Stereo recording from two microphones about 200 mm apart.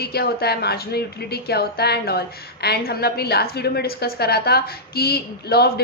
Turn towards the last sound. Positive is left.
turn(degrees=50)  # may be behind; listen again after turning